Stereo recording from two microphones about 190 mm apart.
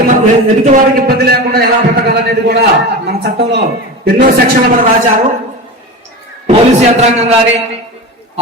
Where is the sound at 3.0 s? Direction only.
60° right (ahead or behind).